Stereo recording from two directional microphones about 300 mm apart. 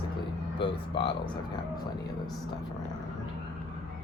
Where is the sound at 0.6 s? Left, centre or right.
Centre.